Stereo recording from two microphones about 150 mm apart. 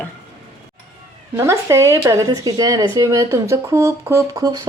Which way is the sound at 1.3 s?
20° right (ahead or behind).